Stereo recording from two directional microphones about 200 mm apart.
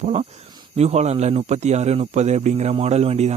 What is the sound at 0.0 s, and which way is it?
Speech, 35° right (ahead or behind).